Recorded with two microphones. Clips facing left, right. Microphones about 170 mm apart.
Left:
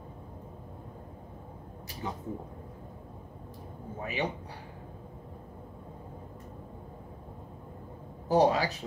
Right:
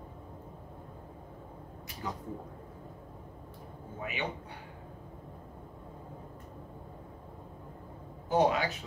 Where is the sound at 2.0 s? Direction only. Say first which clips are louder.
Left 2 dB; 25° left (ahead or behind).